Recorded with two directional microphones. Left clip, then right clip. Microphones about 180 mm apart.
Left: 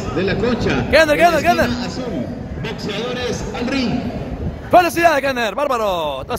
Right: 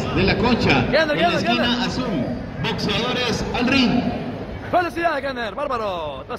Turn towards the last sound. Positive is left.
turn(degrees=45)  # may be behind; listen again after turning